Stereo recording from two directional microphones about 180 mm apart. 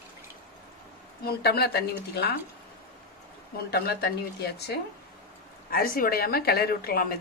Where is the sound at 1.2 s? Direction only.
60° left (ahead or behind).